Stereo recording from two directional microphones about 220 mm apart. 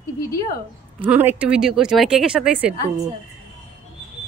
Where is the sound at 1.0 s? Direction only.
10° right (ahead or behind).